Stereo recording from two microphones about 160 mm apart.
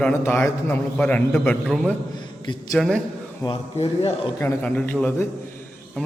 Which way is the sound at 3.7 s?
40° left (ahead or behind).